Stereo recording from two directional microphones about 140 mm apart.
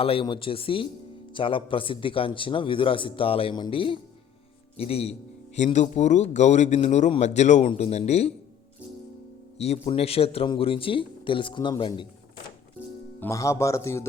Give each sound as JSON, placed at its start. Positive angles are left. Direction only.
{"t": 0.0, "sound": "a man's voice", "side_deg": 40}
{"t": 9.6, "sound": "a man's voice", "side_deg": 45}
{"t": 13.1, "sound": "speech", "side_deg": 20}